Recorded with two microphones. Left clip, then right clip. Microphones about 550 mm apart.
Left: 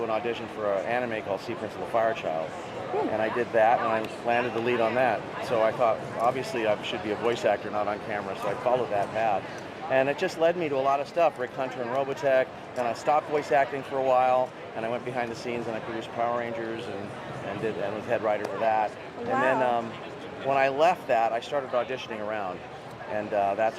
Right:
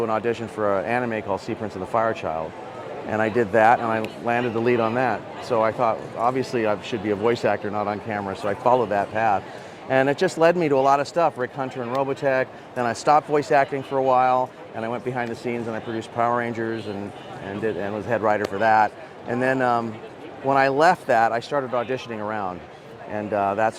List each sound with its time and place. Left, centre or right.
0.1 s a man's voice: right
3.2 s a man's voice: right
12.9 s a man's voice: right
18.1 s a man's voice: right